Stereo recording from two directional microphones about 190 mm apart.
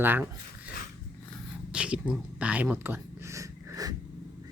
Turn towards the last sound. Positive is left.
turn(degrees=-20)  # may be behind; listen again after turning